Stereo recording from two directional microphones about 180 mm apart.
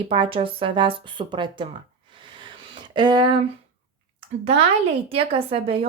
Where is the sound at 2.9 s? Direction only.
25° right (ahead or behind).